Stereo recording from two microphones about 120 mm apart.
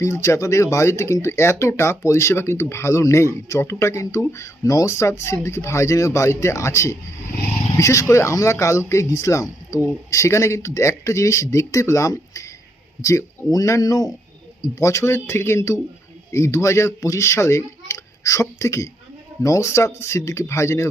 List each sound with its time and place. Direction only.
0.0 s speech: 25° left (ahead or behind)